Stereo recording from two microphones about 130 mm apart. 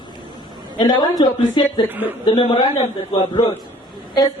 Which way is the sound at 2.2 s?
35° left (ahead or behind).